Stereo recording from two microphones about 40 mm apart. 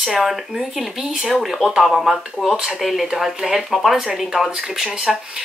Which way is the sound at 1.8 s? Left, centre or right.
Centre.